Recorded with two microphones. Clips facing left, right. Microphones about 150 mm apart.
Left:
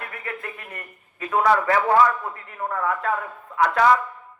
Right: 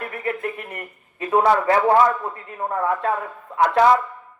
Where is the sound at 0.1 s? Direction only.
30° right (ahead or behind).